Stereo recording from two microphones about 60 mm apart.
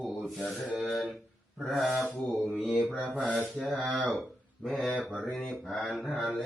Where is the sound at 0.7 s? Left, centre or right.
Centre.